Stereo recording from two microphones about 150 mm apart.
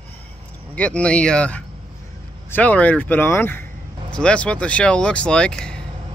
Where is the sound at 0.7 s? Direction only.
10° left (ahead or behind).